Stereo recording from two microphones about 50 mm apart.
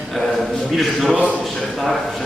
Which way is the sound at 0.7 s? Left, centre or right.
Centre.